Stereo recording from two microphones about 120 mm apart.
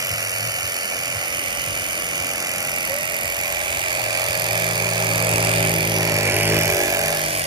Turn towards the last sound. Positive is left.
turn(degrees=-30)  # may be behind; listen again after turning